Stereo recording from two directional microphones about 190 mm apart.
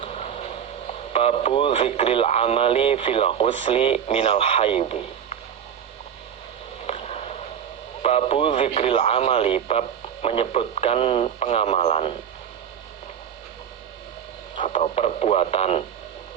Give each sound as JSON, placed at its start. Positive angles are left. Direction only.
{"t": 0.0, "sound": "vehicle", "side_deg": 35}
{"t": 1.1, "sound": "speech", "side_deg": 30}
{"t": 6.8, "sound": "a sound", "side_deg": 35}
{"t": 8.0, "sound": "speech", "side_deg": 30}
{"t": 14.5, "sound": "speech", "side_deg": 30}